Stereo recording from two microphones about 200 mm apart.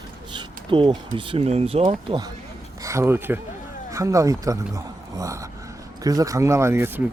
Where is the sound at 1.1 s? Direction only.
25° right (ahead or behind).